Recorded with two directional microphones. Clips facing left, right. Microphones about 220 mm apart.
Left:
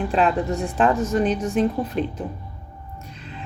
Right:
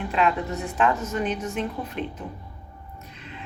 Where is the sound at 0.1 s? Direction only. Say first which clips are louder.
Left 2 dB; 35° left (ahead or behind).